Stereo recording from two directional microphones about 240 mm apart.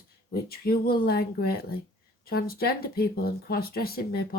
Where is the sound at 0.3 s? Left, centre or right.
Left.